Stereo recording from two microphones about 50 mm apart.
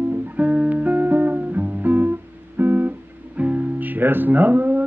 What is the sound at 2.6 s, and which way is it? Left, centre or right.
Guitar, right.